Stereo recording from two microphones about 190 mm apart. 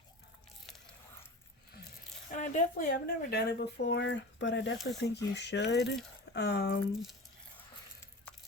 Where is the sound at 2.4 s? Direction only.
45° left (ahead or behind); by 6.7 s 65° left (ahead or behind).